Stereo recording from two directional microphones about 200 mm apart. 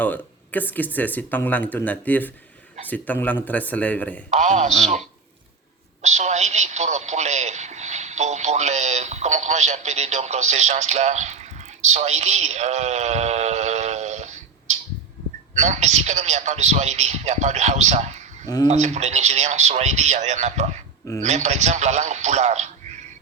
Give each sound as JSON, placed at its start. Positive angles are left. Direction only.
{"t": 0.0, "sound": "speech", "side_deg": 10}
{"t": 4.3, "sound": "a man's voice", "side_deg": -35}
{"t": 6.0, "sound": "a man's voice", "side_deg": -35}
{"t": 18.4, "sound": "speech", "side_deg": 20}
{"t": 18.7, "sound": "a man's voice", "side_deg": -35}